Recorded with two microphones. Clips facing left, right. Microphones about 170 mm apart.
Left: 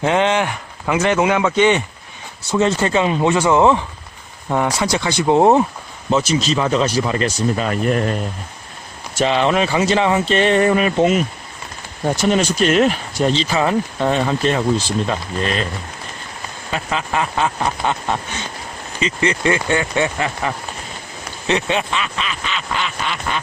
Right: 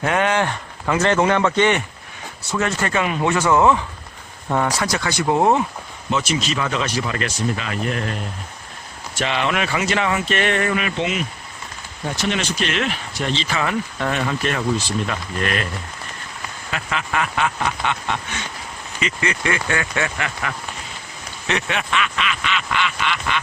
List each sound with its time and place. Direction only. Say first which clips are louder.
0.0 s speech: left 3 dB; 20° left (ahead or behind)
4.4 s speech: left 2 dB; 10° left (ahead or behind)
4.9 s speech: left 4 dB; 25° left (ahead or behind)
16.7 s speech: left 3 dB; 25° left (ahead or behind)